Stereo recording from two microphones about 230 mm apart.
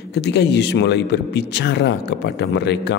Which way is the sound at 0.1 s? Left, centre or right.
Left.